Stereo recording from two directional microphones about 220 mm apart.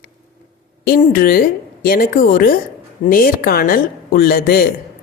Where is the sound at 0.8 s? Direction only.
40° left (ahead or behind).